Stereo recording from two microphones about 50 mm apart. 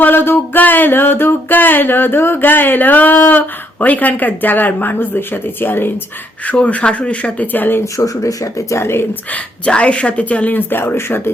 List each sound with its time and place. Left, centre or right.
0.0 s a sound: left
3.2 s a woman's voice: left
6.4 s a woman's voice: left
7.9 s speech: left
8.8 s speech: left
9.3 s a woman's voice: left